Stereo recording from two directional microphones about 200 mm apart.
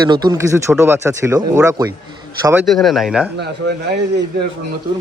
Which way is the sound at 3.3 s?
55° right (ahead or behind).